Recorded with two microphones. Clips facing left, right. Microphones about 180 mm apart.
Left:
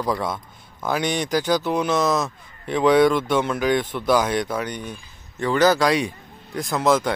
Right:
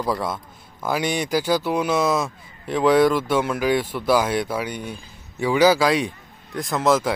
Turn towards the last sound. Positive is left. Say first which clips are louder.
# even
turn(degrees=0)  # may be behind; listen again after turning